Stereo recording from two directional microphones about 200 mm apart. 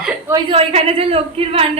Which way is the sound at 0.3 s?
20° right (ahead or behind).